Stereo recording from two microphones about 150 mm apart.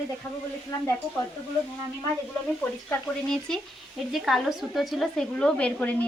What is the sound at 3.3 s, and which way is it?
A woman's voice, centre (ahead or behind).